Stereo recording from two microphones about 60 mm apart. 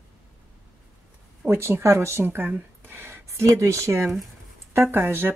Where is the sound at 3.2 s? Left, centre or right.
Right.